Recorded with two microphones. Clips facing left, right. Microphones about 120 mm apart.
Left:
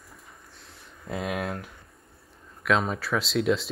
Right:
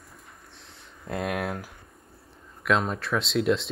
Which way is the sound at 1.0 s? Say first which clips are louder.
Right 1 dB; centre (ahead or behind).